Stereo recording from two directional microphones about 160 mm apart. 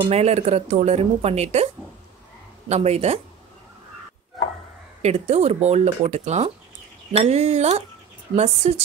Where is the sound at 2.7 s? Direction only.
40° right (ahead or behind).